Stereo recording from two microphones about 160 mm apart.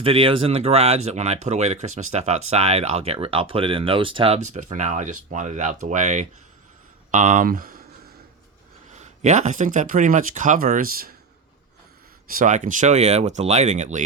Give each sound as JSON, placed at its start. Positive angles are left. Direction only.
{"t": 0.0, "sound": "speech", "side_deg": -35}
{"t": 4.4, "sound": "speech", "side_deg": -50}
{"t": 8.9, "sound": "speech", "side_deg": -45}
{"t": 12.3, "sound": "speech", "side_deg": -55}